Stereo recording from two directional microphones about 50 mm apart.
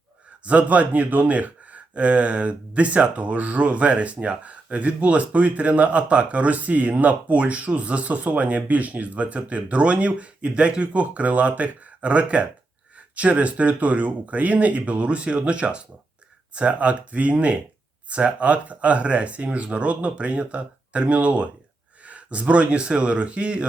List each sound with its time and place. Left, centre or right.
0.4 s speech: right